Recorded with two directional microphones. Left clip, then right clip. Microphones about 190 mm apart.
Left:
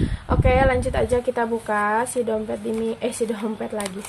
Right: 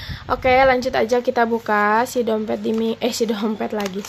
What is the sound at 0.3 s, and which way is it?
A woman's voice, 25° right (ahead or behind).